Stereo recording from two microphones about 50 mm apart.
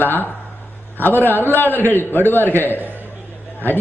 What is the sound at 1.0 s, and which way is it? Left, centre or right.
A man's voice, left.